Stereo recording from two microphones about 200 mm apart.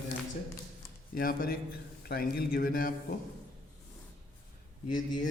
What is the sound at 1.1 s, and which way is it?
A man's voice, 45° left (ahead or behind).